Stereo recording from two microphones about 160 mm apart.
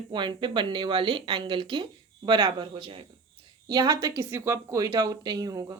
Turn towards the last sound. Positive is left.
turn(degrees=-25)  # may be behind; listen again after turning